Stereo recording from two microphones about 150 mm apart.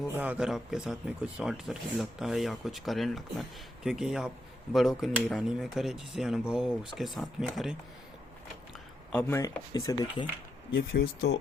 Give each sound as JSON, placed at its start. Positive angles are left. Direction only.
{"t": 0.1, "sound": "speech", "side_deg": -10}
{"t": 9.1, "sound": "speech", "side_deg": 15}
{"t": 10.9, "sound": "speech", "side_deg": 90}